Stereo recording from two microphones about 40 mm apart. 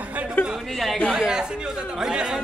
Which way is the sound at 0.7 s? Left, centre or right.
Centre.